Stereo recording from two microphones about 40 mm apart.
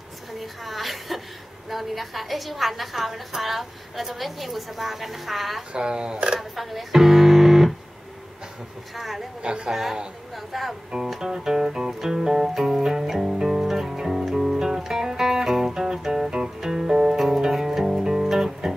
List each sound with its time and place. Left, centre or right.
0.4 s a sound: centre
1.7 s a woman's voice: centre
5.7 s speech: right
6.5 s speech: centre
8.9 s a woman's voice: centre
9.4 s speech: right
9.7 s a woman's voice: centre
11.1 s music: centre